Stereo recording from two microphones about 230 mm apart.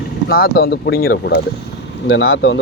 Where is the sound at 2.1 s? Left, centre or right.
Left.